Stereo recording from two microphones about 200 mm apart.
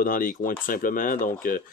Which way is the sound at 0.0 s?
45° left (ahead or behind).